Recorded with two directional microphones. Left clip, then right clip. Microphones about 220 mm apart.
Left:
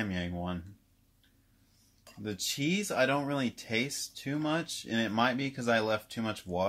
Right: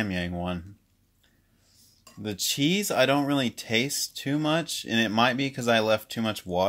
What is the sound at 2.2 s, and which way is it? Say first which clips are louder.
Speech: right 7 dB; 40° right (ahead or behind).